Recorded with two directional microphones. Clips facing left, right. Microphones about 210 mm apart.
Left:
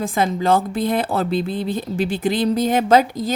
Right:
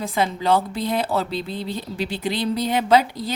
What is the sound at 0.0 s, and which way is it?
Speech, 50° left (ahead or behind).